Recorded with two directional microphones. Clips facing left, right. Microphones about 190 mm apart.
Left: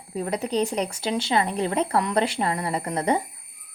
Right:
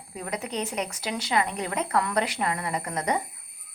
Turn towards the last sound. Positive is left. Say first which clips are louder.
# left 4 dB
turn(degrees=30)  # may be behind; listen again after turning